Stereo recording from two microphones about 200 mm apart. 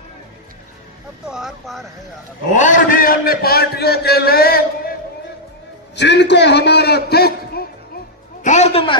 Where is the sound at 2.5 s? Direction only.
40° left (ahead or behind).